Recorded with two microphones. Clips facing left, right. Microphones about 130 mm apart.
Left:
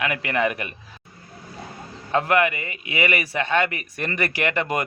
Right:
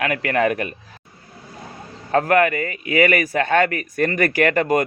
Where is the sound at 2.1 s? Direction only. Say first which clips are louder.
Right 4 dB; 45° right (ahead or behind).